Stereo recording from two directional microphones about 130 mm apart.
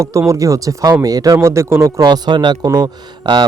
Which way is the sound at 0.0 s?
20° right (ahead or behind).